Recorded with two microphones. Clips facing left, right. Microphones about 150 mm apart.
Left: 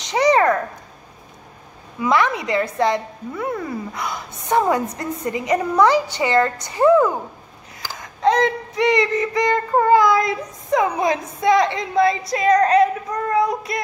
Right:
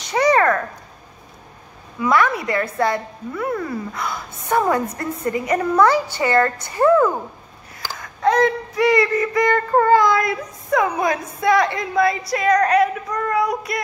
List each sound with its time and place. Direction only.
0.1 s a sound: 20° left (ahead or behind)
2.0 s child singing: 20° left (ahead or behind)
4.9 s a woman's voice: 20° left (ahead or behind)
8.0 s child singing: 20° left (ahead or behind)